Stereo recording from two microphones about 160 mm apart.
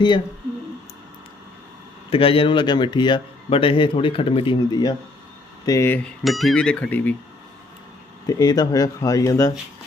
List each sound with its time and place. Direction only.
2.0 s a man's voice: 35° left (ahead or behind)
5.7 s speech: 15° left (ahead or behind)
8.3 s speech: 25° left (ahead or behind)